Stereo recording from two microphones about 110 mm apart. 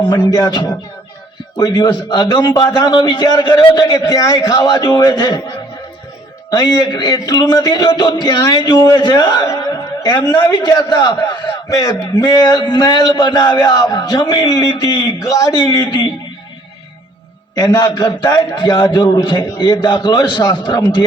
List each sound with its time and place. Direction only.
0.2 s a man's voice: 30° left (ahead or behind)
2.6 s a man's voice: 25° left (ahead or behind)
3.1 s a man's voice: 45° left (ahead or behind)
3.8 s a man's voice: 30° left (ahead or behind)
6.5 s a man's voice: 35° left (ahead or behind)
9.5 s a man's voice: 30° left (ahead or behind)
17.6 s a man's voice: 35° left (ahead or behind)